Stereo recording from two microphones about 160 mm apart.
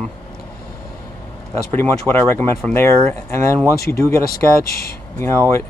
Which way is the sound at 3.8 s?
15° left (ahead or behind).